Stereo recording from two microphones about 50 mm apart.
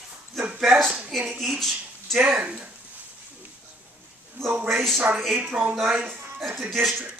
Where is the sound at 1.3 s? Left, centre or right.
Centre.